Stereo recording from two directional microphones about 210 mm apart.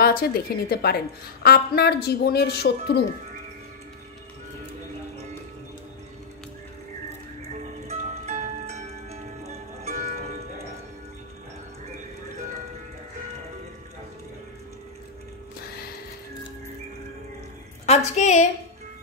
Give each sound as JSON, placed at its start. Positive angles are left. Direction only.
{"t": 0.0, "sound": "a woman's voice", "side_deg": 45}
{"t": 8.3, "sound": "zither", "side_deg": -35}
{"t": 9.8, "sound": "music", "side_deg": -30}
{"t": 17.8, "sound": "a woman's voice", "side_deg": 35}